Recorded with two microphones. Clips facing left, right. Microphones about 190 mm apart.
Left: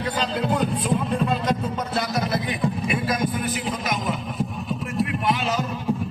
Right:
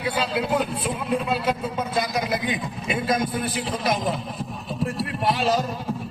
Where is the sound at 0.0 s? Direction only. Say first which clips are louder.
Even; 10° right (ahead or behind); by 5.6 s 35° right (ahead or behind).